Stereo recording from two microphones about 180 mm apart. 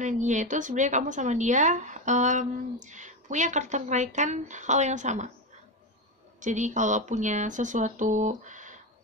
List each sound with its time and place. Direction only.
0.0 s a woman's voice: 40° right (ahead or behind)
6.4 s a woman's voice: 45° right (ahead or behind)